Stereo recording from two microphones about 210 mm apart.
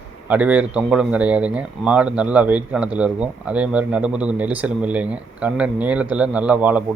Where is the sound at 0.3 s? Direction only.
5° right (ahead or behind).